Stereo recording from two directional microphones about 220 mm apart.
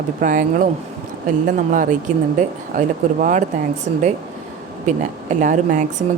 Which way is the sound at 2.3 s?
35° right (ahead or behind).